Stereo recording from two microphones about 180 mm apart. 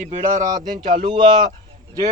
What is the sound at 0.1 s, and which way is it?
Speech, 45° right (ahead or behind).